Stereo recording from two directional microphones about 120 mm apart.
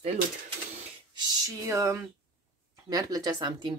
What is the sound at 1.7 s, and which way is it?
Speech, 25° right (ahead or behind).